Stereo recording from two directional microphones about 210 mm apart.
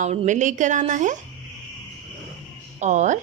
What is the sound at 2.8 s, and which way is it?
Speech, 35° right (ahead or behind).